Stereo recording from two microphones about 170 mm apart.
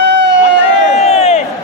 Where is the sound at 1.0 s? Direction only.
40° left (ahead or behind).